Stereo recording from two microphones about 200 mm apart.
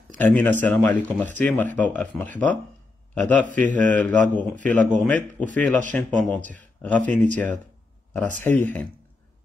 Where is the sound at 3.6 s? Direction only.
40° right (ahead or behind).